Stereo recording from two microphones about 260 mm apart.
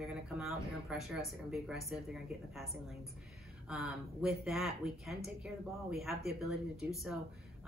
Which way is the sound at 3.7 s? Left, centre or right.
Centre.